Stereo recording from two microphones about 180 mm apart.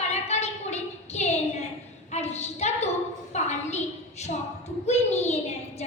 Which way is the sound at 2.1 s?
35° left (ahead or behind).